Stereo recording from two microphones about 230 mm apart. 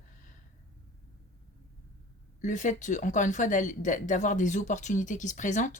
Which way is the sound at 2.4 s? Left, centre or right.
Left.